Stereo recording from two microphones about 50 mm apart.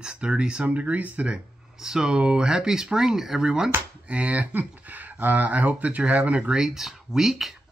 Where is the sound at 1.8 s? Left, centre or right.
Centre.